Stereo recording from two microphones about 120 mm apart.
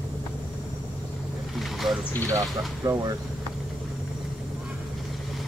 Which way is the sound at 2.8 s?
30° right (ahead or behind).